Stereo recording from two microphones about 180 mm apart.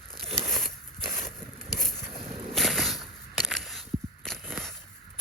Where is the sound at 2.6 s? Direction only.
Centre (ahead or behind).